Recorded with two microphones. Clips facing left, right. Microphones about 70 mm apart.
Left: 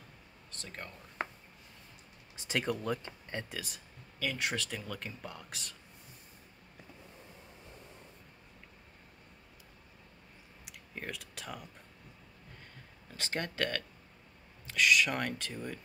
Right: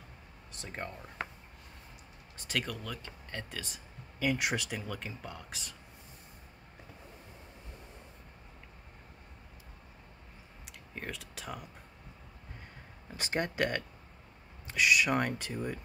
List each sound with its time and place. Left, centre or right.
0.5 s speech: centre
2.4 s speech: left
3.3 s speech: centre
3.5 s speech: centre
4.2 s speech: centre
10.6 s clicking: centre
13.1 s speech: centre